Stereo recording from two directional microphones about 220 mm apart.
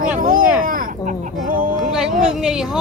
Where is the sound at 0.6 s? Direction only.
40° right (ahead or behind).